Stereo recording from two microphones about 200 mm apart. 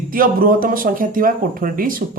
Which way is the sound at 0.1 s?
45° right (ahead or behind).